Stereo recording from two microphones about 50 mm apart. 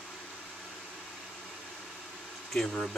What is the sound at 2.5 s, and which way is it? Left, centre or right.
Dishes, centre.